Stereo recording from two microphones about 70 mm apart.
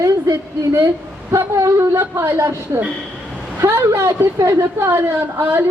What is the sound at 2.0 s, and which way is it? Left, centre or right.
A woman's voice, right.